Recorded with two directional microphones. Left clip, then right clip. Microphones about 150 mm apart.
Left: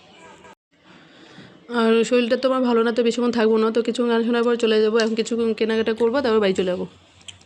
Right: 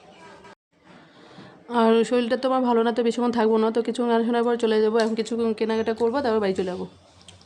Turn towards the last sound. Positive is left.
turn(degrees=20)  # may be behind; listen again after turning